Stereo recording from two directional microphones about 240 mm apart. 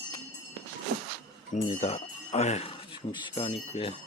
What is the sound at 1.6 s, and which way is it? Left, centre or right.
Speech, left.